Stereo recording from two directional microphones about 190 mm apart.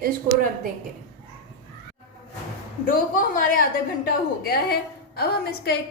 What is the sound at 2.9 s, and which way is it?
A woman's voice, 50° left (ahead or behind).